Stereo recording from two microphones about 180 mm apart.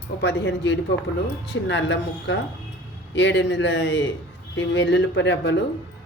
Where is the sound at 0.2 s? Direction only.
75° left (ahead or behind).